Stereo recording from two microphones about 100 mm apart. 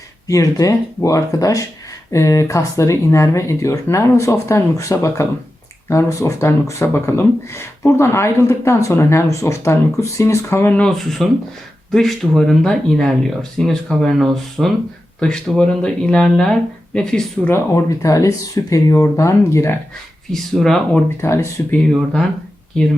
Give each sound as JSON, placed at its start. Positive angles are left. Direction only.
{"t": 0.3, "sound": "speech", "side_deg": 35}
{"t": 10.7, "sound": "speech", "side_deg": 10}
{"t": 17.4, "sound": "speech", "side_deg": 25}
{"t": 20.3, "sound": "speech", "side_deg": 0}
{"t": 21.2, "sound": "speech", "side_deg": 25}